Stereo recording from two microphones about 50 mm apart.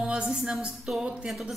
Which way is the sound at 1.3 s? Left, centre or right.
Centre.